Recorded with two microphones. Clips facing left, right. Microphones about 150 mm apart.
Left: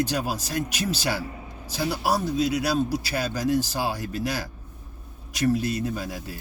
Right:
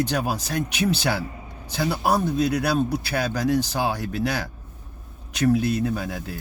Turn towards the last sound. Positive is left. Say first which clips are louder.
# right 4 dB
turn(degrees=-65)  # may be behind; listen again after turning